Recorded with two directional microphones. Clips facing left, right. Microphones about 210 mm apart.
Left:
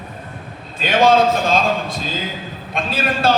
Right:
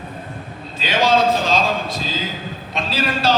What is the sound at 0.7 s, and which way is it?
A man's voice, 50° left (ahead or behind).